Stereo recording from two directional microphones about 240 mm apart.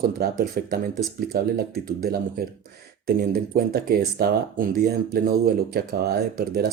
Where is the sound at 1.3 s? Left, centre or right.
Right.